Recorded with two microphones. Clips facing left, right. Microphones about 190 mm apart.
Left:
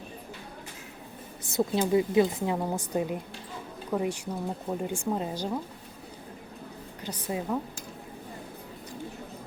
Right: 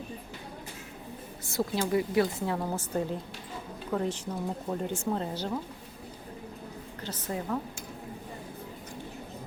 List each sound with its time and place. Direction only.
1.5 s speech: 20° left (ahead or behind)
7.0 s speech: 15° left (ahead or behind)